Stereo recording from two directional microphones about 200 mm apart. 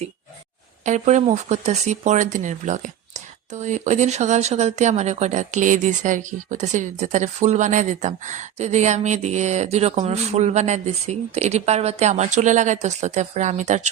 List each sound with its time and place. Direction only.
0.9 s speech: 35° right (ahead or behind)